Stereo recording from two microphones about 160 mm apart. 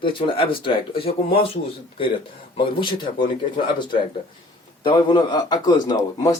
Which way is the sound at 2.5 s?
30° left (ahead or behind).